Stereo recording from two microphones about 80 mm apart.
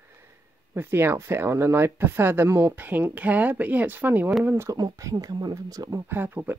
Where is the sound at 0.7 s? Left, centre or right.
Right.